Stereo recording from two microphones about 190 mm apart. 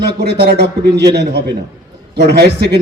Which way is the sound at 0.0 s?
60° right (ahead or behind).